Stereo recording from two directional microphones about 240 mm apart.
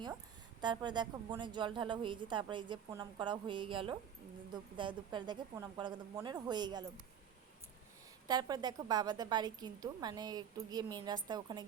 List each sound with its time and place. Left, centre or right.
0.6 s a woman's voice: centre
8.3 s a woman's voice: centre